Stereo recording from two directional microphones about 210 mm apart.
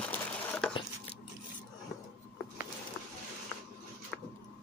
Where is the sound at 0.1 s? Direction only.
5° left (ahead or behind).